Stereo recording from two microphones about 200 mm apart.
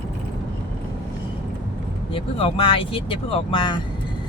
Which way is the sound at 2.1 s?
25° left (ahead or behind).